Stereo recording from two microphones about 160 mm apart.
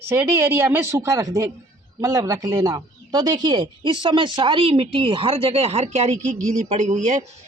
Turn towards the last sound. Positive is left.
turn(degrees=-45)  # may be behind; listen again after turning